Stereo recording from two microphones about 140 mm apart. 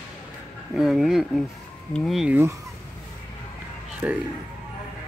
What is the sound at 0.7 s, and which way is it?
Speech, 5° right (ahead or behind).